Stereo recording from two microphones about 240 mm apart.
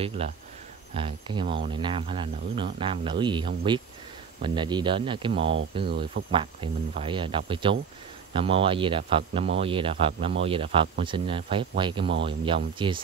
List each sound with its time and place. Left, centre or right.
0.2 s speech: right